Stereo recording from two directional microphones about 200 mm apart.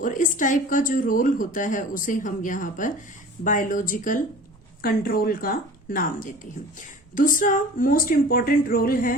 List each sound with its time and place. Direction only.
0.0 s a woman's voice: 40° left (ahead or behind)